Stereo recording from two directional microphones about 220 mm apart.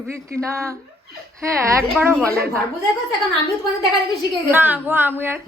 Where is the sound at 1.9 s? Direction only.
5° right (ahead or behind).